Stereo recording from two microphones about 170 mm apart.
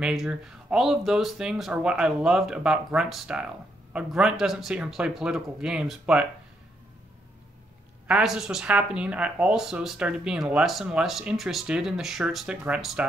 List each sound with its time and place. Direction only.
0.0 s speech: 5° right (ahead or behind)
8.1 s speech: 5° right (ahead or behind)